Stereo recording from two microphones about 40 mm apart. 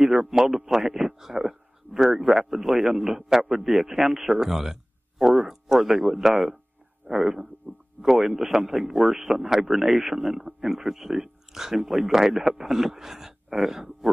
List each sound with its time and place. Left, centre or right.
0.0 s a man's voice: centre
7.7 s speech: right
8.0 s a man's voice: centre